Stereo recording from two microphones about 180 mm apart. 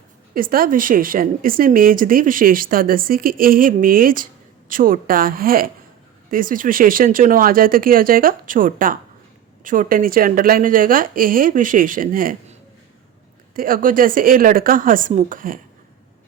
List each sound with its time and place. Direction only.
0.3 s speech: 55° right (ahead or behind)
13.6 s speech: 50° right (ahead or behind)